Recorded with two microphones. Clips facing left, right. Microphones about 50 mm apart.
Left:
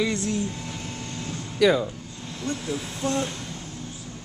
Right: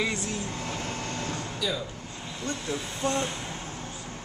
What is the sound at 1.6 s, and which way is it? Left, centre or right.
Speech, left.